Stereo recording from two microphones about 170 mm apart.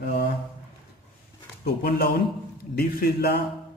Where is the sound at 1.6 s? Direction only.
65° left (ahead or behind).